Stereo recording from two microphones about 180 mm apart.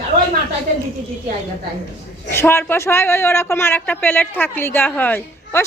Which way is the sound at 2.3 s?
15° left (ahead or behind).